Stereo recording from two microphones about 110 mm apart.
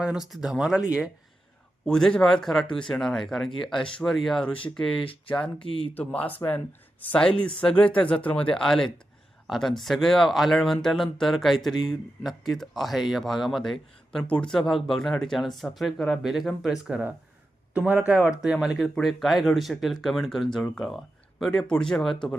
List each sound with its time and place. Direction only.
0.0 s speech: 5° right (ahead or behind)
1.8 s speech: 5° left (ahead or behind)
4.9 s speech: 55° left (ahead or behind)
5.3 s speech: 10° left (ahead or behind)
7.6 s speech: 10° left (ahead or behind)